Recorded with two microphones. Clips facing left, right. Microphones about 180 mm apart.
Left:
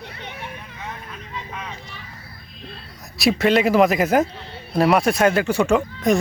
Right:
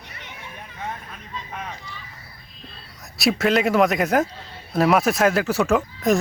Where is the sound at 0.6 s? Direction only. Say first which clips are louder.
Right 2 dB; 50° right (ahead or behind).